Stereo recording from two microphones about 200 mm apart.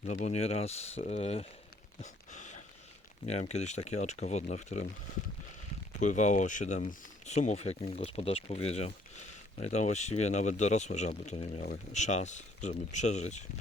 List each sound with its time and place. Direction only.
0.0 s speech: 35° left (ahead or behind)
2.0 s a sound: 40° left (ahead or behind)
3.2 s speech: 30° left (ahead or behind)
6.0 s speech: 35° left (ahead or behind)
11.6 s speech: 40° left (ahead or behind)